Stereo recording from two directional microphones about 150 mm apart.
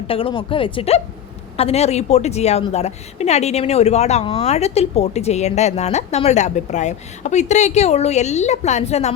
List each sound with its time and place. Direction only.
0.1 s a woman's voice: 35° left (ahead or behind)